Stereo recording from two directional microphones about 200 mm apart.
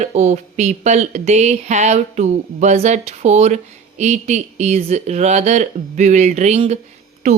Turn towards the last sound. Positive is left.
turn(degrees=-35)  # may be behind; listen again after turning